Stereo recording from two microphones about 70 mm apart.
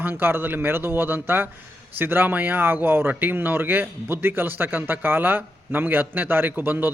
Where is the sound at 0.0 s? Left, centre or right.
Right.